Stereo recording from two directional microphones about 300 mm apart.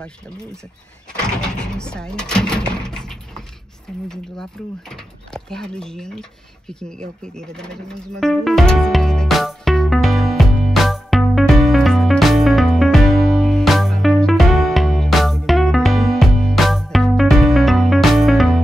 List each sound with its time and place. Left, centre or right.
0.0 s speech: centre
6.7 s music: centre